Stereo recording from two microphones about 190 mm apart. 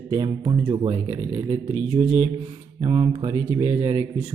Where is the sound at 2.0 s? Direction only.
25° right (ahead or behind).